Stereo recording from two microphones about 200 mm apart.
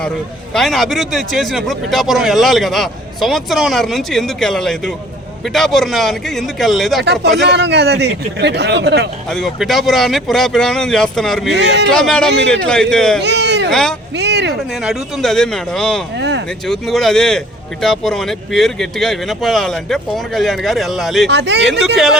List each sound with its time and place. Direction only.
0.5 s speech: centre (ahead or behind)
7.0 s a man's voice: 55° right (ahead or behind)
9.3 s speech: centre (ahead or behind)
11.5 s a man's voice: 60° right (ahead or behind)
11.9 s speech: 5° left (ahead or behind)
13.2 s a sound: 60° right (ahead or behind)
13.7 s speech: centre (ahead or behind)
14.2 s a man's voice: 55° right (ahead or behind)
14.8 s speech: centre (ahead or behind)
16.1 s a man's voice: 60° right (ahead or behind)
16.6 s speech: centre (ahead or behind)
21.2 s a man's voice: 60° right (ahead or behind)
21.9 s speech: centre (ahead or behind)